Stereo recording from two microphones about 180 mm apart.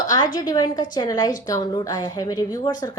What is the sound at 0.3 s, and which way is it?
A woman's voice, 25° left (ahead or behind).